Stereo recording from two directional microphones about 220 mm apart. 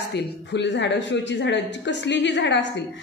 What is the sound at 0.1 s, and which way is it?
A woman's voice, 50° left (ahead or behind).